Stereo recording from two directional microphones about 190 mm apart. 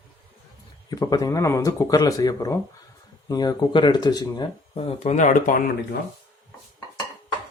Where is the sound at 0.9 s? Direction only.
20° left (ahead or behind); by 5.6 s 45° left (ahead or behind).